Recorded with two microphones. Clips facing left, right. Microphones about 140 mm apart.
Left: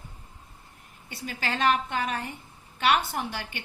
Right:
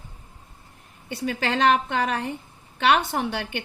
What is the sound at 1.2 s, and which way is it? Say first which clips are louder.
A woman's voice: right 6 dB; 65° right (ahead or behind).